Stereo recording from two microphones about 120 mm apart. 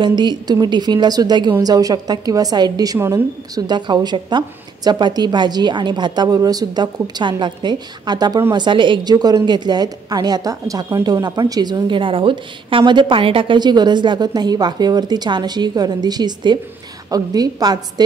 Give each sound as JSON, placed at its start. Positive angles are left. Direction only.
{"t": 0.0, "sound": "a woman's voice", "side_deg": -40}